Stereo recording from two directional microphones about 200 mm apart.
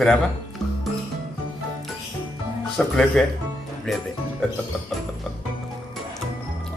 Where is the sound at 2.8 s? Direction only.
5° left (ahead or behind).